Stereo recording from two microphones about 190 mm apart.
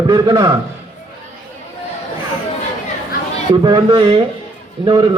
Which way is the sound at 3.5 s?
25° right (ahead or behind).